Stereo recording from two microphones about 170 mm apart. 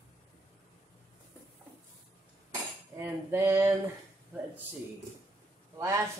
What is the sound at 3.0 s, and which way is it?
Cutlery, 15° right (ahead or behind).